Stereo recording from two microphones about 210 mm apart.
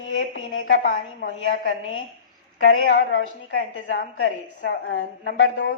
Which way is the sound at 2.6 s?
70° left (ahead or behind).